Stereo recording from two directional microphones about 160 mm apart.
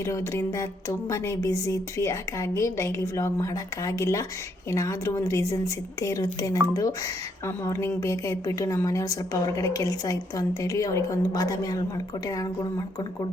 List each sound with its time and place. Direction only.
0.0 s speech: 20° left (ahead or behind)